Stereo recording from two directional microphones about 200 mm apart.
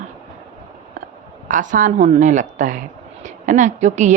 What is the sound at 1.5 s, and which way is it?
A woman's voice, 40° right (ahead or behind).